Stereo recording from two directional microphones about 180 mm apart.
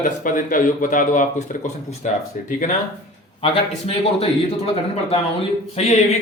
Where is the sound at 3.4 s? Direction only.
30° left (ahead or behind).